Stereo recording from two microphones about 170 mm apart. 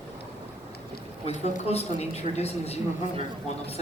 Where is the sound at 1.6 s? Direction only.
40° left (ahead or behind).